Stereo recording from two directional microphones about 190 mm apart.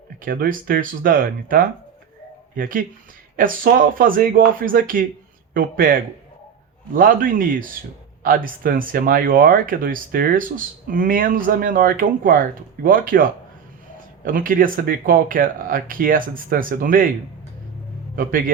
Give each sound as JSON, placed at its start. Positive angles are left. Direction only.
{"t": 0.2, "sound": "speech", "side_deg": -50}
{"t": 18.2, "sound": "speech", "side_deg": -45}